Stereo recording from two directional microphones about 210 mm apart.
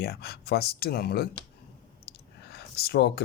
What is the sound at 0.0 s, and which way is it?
Speech, 50° left (ahead or behind).